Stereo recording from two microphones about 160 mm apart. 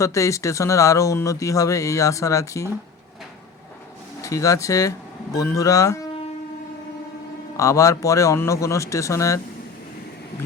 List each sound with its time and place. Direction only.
0.0 s speech: 20° left (ahead or behind)
4.2 s speech: 20° left (ahead or behind)
7.5 s speech: 20° left (ahead or behind)